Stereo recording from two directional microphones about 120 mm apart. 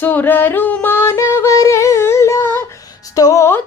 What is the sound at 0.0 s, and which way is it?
Yodeling, 15° left (ahead or behind).